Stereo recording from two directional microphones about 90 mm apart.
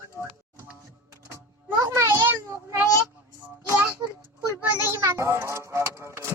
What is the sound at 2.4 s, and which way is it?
Speech, 30° right (ahead or behind).